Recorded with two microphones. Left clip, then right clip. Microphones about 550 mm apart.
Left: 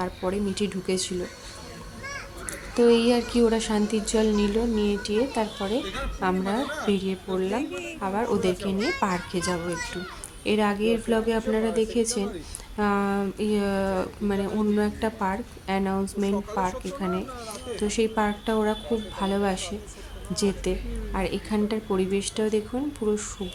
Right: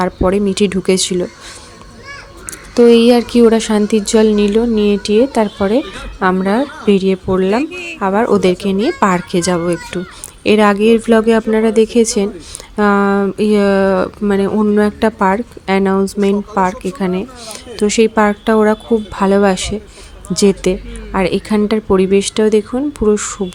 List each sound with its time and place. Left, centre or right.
0.0 s speech: left
2.7 s speech: left
7.9 s speech: left